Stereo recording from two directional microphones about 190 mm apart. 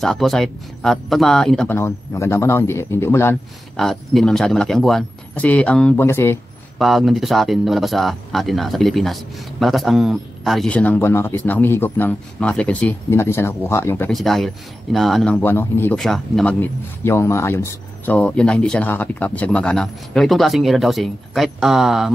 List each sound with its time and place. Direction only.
0.0 s speech: centre (ahead or behind)
1.8 s speech: 15° left (ahead or behind)
3.7 s speech: centre (ahead or behind)
6.8 s speech: centre (ahead or behind)
14.1 s speech: centre (ahead or behind)
17.0 s speech: 15° left (ahead or behind)